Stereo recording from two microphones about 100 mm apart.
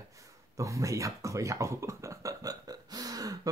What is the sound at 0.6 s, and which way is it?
Speech, 30° right (ahead or behind).